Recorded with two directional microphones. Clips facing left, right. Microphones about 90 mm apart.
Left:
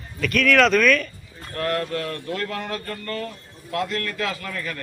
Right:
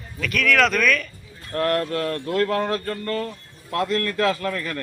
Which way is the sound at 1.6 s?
40° right (ahead or behind).